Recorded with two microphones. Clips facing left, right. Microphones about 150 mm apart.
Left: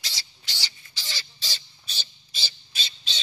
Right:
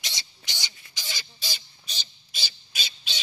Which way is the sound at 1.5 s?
15° right (ahead or behind).